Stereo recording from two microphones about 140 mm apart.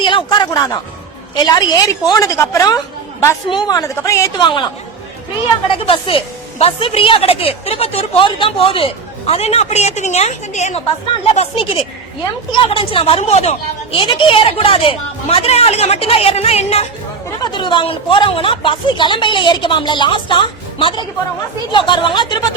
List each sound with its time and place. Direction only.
0.0 s a woman's voice: 35° left (ahead or behind)
4.4 s speech: 35° left (ahead or behind)
5.7 s a woman's voice: 40° left (ahead or behind); by 10.8 s 55° left (ahead or behind)
11.3 s speech: 40° left (ahead or behind)
17.4 s speech: 35° left (ahead or behind)